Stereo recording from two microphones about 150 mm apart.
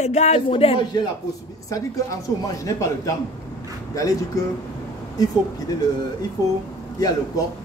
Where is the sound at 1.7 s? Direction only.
20° left (ahead or behind).